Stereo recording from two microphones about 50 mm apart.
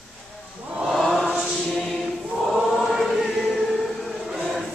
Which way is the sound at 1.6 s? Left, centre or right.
Centre.